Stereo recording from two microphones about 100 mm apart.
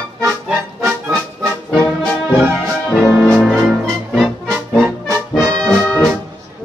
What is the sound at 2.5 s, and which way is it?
Music, 20° right (ahead or behind).